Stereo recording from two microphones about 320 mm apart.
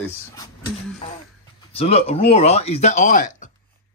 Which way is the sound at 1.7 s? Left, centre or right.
Centre.